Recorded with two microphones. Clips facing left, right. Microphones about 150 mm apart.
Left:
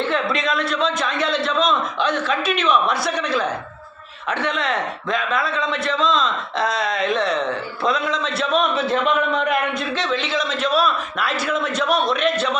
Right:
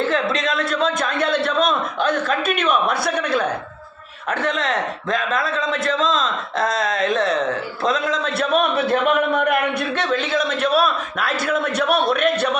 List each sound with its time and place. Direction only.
0.0 s speech: 40° right (ahead or behind); by 3.4 s 55° right (ahead or behind)
4.3 s speech: 45° right (ahead or behind); by 12.5 s 60° right (ahead or behind)